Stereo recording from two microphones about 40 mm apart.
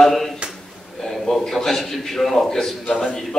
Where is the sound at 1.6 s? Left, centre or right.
Centre.